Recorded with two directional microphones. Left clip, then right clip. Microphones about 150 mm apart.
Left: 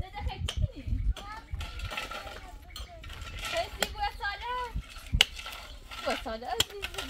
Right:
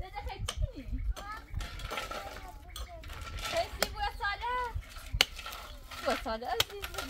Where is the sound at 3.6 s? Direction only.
15° left (ahead or behind).